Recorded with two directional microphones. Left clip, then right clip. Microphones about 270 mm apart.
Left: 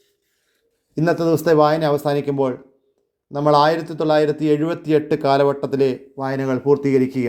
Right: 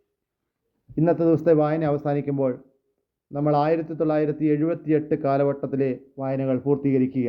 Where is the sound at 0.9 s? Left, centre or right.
Centre.